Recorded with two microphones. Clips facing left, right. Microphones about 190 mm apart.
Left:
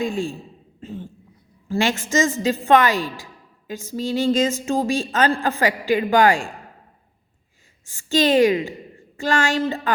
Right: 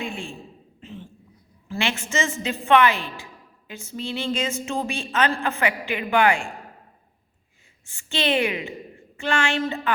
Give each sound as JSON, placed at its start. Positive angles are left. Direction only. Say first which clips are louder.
{"t": 0.0, "sound": "a woman's voice", "louder": "left 8 dB", "side_deg": 40}
{"t": 7.9, "sound": "a woman's voice", "louder": "left 6 dB", "side_deg": 40}